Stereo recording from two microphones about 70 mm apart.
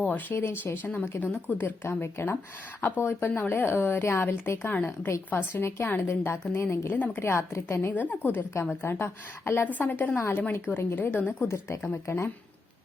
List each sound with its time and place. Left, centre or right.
0.0 s a woman's voice: left
9.7 s a woman's voice: left